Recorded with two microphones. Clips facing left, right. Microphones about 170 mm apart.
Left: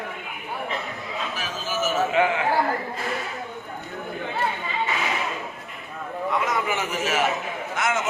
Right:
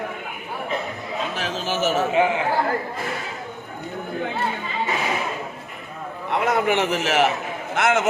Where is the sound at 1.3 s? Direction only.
70° right (ahead or behind).